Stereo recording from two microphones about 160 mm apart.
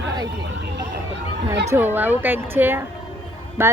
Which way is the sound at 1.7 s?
15° right (ahead or behind).